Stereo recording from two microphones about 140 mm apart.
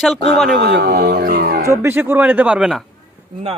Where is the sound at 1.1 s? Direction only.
90° right.